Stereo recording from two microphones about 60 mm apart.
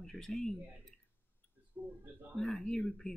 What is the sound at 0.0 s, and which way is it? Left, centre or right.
Speech, centre.